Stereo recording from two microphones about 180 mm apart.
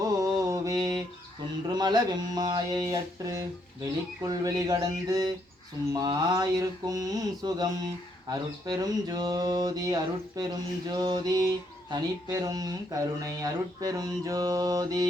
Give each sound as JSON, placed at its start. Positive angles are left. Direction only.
{"t": 0.0, "sound": "mantra", "side_deg": -20}